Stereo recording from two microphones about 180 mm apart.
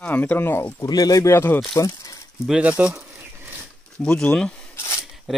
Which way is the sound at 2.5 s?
5° right (ahead or behind).